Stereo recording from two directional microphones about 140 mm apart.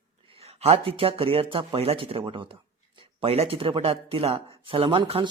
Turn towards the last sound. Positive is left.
turn(degrees=-40)  # may be behind; listen again after turning